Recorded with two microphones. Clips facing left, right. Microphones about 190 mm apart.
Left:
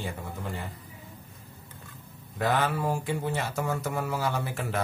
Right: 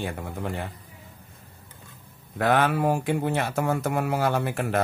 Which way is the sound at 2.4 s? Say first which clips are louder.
Right 5 dB; 65° right (ahead or behind).